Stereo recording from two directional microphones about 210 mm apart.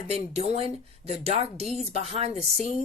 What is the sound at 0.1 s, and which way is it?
Speech, 30° right (ahead or behind).